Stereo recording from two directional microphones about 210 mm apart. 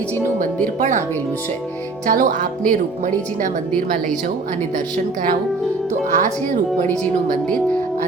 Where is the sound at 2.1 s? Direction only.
40° right (ahead or behind).